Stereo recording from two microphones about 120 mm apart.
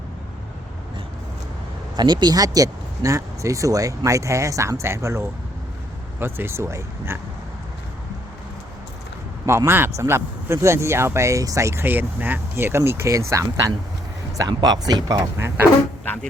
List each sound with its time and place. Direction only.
2.0 s speech: 35° right (ahead or behind)
9.5 s speech: 20° right (ahead or behind)
15.4 s speech: 20° right (ahead or behind)